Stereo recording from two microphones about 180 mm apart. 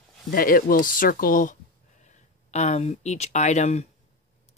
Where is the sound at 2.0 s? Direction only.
40° left (ahead or behind).